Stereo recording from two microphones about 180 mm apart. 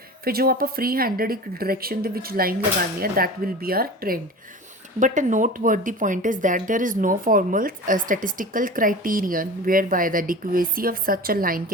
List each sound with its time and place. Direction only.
0.3 s speech: 55° right (ahead or behind)
4.9 s speech: 45° right (ahead or behind)